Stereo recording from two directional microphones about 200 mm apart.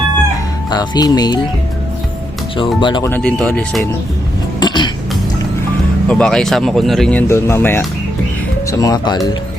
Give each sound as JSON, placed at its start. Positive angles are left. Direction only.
{"t": 0.7, "sound": "speech", "side_deg": 20}
{"t": 2.8, "sound": "speech", "side_deg": 20}
{"t": 3.1, "sound": "speech", "side_deg": 5}
{"t": 4.6, "sound": "cough", "side_deg": 20}
{"t": 6.1, "sound": "speech", "side_deg": 5}